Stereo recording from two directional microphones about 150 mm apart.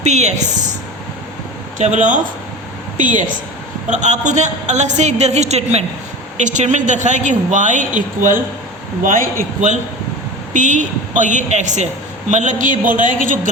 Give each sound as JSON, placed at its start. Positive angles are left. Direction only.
{"t": 0.0, "sound": "a woman's voice", "side_deg": -50}
{"t": 1.8, "sound": "a woman's voice", "side_deg": -55}